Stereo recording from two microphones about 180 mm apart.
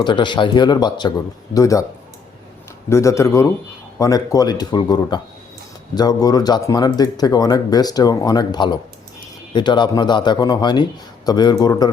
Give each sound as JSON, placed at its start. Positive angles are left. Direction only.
{"t": 0.0, "sound": "speech", "side_deg": 25}
{"t": 2.9, "sound": "speech", "side_deg": 15}